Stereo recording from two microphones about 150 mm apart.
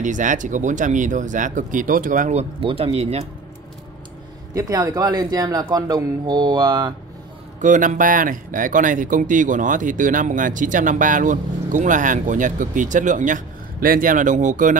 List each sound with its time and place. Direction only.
0.0 s speech: 60° right (ahead or behind)
2.3 s speech: 40° right (ahead or behind)
4.6 s speech: 20° right (ahead or behind)
7.6 s speech: 60° right (ahead or behind)